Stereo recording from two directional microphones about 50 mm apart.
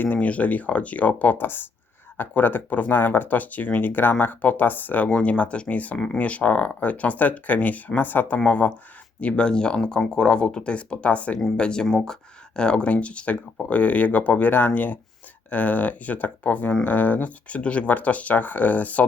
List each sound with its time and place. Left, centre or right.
0.0 s speech: left
5.2 s speech: left
9.2 s speech: centre
12.5 s speech: centre